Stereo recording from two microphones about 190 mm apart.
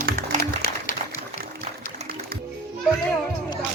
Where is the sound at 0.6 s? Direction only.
55° left (ahead or behind).